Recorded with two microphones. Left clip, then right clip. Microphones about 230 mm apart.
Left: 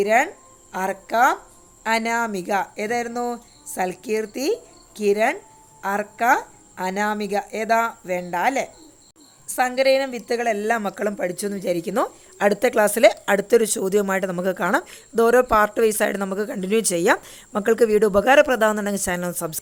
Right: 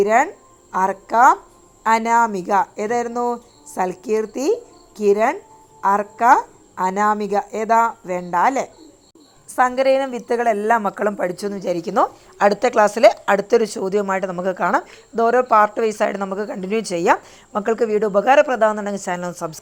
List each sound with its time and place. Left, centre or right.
0.0 s a woman's voice: centre; by 19.5 s left